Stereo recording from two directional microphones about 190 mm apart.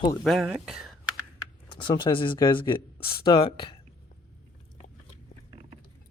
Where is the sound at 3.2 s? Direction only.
25° left (ahead or behind).